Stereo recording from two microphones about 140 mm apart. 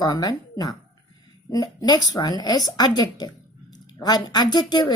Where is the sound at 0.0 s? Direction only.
30° left (ahead or behind).